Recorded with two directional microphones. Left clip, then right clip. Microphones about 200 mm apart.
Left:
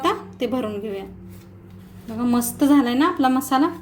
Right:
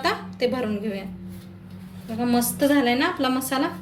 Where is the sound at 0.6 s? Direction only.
40° left (ahead or behind).